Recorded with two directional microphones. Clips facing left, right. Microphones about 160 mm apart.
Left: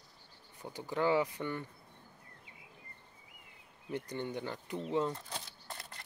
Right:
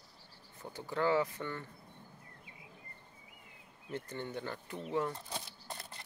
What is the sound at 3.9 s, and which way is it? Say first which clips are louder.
Speech: left 3 dB; 15° left (ahead or behind).